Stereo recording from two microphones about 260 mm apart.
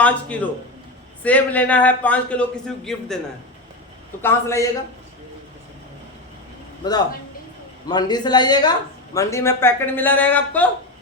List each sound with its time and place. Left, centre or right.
0.0 s a man's voice: centre
4.2 s a man's voice: centre
6.8 s a man's voice: centre